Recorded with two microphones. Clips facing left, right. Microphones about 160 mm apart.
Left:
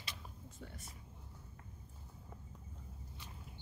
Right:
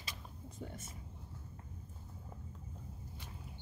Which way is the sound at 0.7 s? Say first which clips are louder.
Right 5 dB; 25° right (ahead or behind).